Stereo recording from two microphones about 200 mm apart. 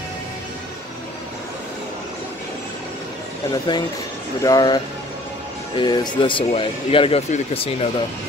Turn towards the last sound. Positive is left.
turn(degrees=30)  # may be behind; listen again after turning